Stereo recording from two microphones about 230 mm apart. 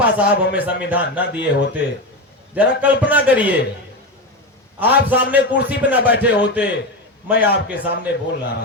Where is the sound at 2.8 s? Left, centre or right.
Centre.